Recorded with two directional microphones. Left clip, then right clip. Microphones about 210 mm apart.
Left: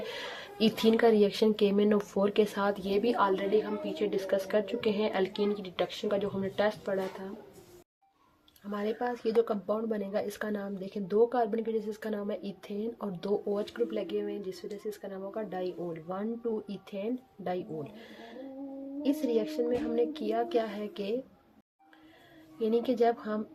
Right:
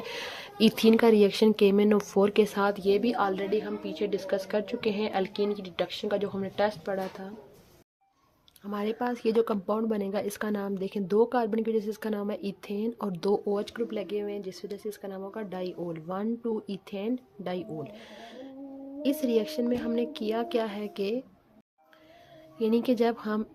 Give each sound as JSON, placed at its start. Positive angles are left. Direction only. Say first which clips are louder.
{"t": 0.0, "sound": "speech", "louder": "right 2 dB", "side_deg": -30}
{"t": 8.7, "sound": "speech", "louder": "right 2 dB", "side_deg": -30}
{"t": 22.5, "sound": "speech", "louder": "right 2 dB", "side_deg": -30}